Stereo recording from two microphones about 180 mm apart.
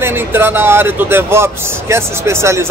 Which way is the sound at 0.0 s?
10° right (ahead or behind).